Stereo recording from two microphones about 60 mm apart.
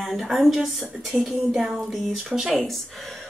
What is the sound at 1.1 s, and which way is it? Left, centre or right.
Speech, right.